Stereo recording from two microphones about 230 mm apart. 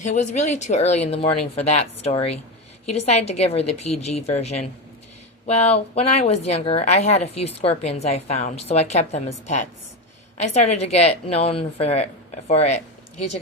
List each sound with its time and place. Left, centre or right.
0.0 s a woman's voice: left
5.7 s a woman's voice: left